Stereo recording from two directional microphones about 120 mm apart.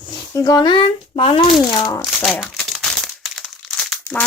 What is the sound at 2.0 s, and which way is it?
Crumpling, centre (ahead or behind).